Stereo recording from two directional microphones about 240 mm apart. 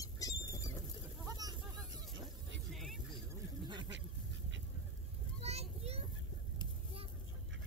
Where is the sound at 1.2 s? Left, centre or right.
Centre.